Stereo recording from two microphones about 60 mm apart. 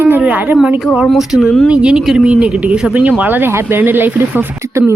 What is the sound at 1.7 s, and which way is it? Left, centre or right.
Speech, right.